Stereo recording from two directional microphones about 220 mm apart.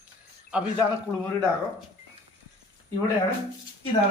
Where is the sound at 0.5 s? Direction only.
5° right (ahead or behind).